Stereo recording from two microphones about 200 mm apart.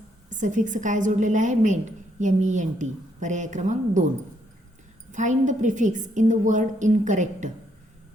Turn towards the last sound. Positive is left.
turn(degrees=-35)  # may be behind; listen again after turning